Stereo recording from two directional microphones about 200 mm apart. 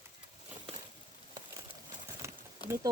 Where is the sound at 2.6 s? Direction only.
20° left (ahead or behind).